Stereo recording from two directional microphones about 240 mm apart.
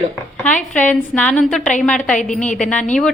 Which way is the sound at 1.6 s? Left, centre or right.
Left.